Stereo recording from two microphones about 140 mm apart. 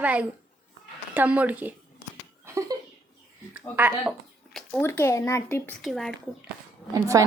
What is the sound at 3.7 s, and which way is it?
Speech, 15° right (ahead or behind).